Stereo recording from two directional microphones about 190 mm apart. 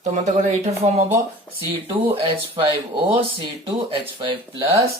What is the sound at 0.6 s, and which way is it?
Speech, 35° right (ahead or behind).